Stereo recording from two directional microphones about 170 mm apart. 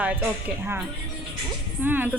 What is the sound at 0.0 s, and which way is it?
Speech, 10° right (ahead or behind).